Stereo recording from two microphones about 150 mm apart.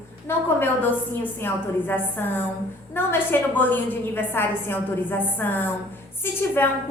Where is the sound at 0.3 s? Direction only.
15° left (ahead or behind).